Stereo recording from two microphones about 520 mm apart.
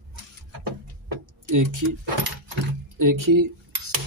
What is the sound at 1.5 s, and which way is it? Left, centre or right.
Speech, right.